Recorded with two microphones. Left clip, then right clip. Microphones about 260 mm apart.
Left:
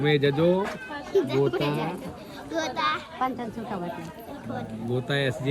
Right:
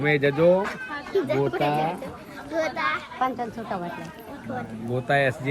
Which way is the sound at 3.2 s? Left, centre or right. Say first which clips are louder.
Right 4 dB; left.